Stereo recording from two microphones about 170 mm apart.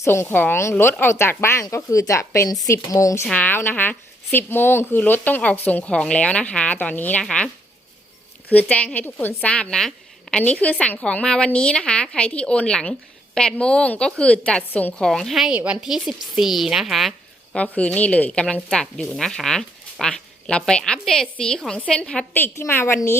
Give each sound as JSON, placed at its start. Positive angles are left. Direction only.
{"t": 0.0, "sound": "a woman's voice", "side_deg": 15}